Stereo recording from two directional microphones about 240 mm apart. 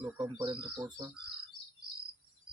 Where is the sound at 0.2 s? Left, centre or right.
Centre.